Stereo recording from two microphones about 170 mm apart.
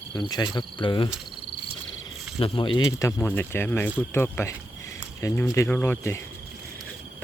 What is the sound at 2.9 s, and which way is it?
Speech, 15° left (ahead or behind).